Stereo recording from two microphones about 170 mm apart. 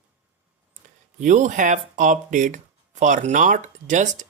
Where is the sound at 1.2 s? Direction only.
45° right (ahead or behind).